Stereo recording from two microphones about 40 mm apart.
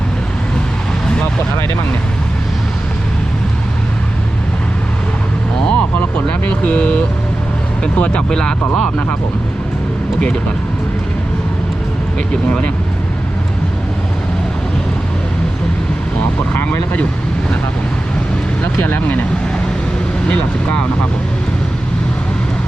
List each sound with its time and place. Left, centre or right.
5.6 s vehicle: left
7.9 s speech: left
8.4 s speech: centre
18.6 s speech: left
20.2 s speech: left